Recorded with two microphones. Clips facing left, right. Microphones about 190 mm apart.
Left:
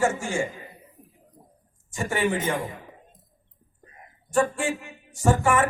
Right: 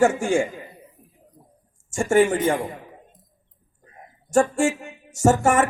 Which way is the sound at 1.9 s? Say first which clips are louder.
Right 7 dB; 45° right (ahead or behind).